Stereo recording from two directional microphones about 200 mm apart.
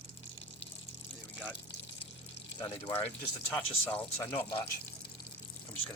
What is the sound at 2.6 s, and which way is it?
Speech, 15° left (ahead or behind).